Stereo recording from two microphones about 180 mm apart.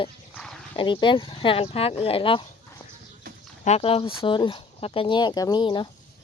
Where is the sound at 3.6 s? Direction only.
35° left (ahead or behind).